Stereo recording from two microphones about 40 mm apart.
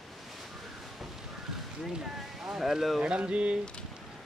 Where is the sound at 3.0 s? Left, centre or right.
Right.